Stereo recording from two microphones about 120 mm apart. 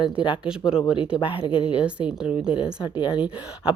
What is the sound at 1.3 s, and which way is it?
Speech, 45° left (ahead or behind).